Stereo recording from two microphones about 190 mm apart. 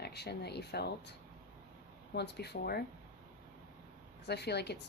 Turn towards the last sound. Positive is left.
turn(degrees=60)  # may be behind; listen again after turning